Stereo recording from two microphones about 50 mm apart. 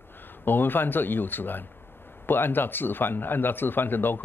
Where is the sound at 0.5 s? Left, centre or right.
Left.